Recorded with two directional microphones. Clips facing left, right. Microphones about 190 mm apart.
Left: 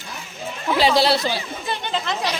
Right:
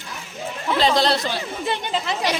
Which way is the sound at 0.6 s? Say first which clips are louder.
Left 1 dB; 5° left (ahead or behind).